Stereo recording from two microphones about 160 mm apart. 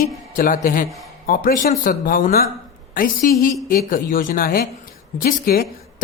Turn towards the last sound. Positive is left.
turn(degrees=65)  # may be behind; listen again after turning